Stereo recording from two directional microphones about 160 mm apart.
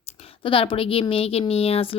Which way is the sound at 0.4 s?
35° left (ahead or behind).